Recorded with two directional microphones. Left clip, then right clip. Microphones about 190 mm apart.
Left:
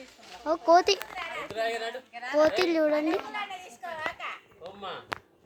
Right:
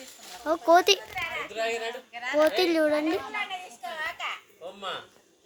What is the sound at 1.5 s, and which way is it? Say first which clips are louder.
Speech: left 1 dB; 45° left (ahead or behind).